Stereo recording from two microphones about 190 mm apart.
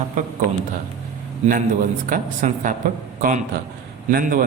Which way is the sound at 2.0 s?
45° right (ahead or behind).